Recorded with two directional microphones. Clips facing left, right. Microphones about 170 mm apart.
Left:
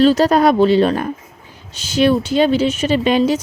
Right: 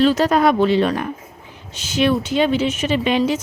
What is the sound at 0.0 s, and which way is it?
Speech, 35° left (ahead or behind).